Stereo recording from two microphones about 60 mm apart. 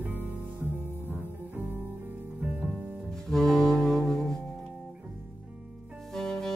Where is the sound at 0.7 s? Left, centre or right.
Left.